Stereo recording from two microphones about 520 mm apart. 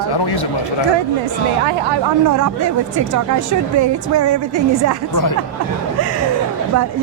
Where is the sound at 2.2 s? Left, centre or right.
Right.